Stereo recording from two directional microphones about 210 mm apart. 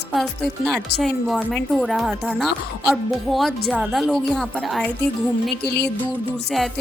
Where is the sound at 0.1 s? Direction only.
Centre (ahead or behind).